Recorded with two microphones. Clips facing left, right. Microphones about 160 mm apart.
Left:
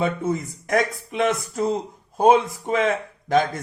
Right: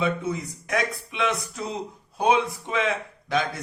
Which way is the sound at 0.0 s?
50° left (ahead or behind).